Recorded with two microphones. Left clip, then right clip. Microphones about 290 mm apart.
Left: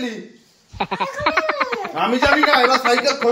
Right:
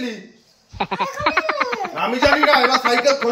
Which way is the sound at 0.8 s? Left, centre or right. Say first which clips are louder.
Even; centre.